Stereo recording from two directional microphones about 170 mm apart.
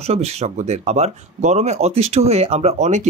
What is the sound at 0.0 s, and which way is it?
Speech, 40° right (ahead or behind).